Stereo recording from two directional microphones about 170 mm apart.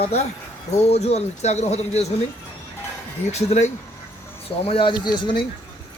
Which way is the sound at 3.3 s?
45° left (ahead or behind).